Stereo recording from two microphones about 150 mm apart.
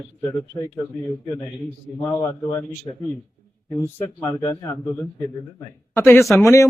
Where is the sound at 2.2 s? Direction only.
25° left (ahead or behind).